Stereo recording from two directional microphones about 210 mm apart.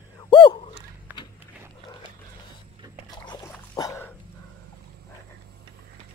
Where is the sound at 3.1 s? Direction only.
20° left (ahead or behind).